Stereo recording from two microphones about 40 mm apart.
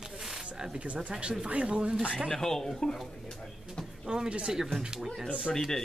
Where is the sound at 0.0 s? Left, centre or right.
Centre.